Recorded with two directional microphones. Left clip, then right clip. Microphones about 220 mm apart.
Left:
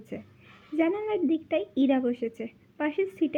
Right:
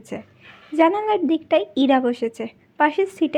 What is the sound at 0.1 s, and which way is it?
A woman's voice, 15° right (ahead or behind).